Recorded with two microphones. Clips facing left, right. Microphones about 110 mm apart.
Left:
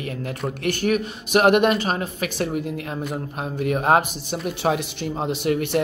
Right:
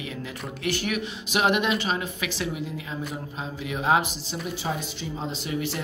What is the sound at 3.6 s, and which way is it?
Speech, 55° left (ahead or behind).